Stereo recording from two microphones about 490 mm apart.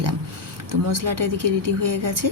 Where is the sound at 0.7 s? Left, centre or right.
Right.